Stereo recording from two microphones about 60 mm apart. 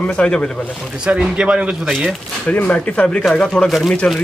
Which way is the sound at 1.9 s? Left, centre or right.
Centre.